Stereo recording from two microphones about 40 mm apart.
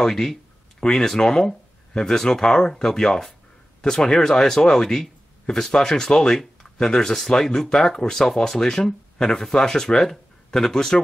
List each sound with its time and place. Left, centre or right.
0.0 s speech: centre